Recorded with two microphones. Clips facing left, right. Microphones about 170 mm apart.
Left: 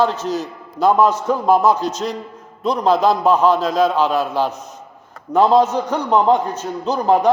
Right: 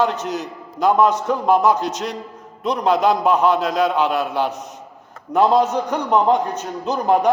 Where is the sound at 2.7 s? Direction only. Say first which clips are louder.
Left 1 dB; 35° left (ahead or behind).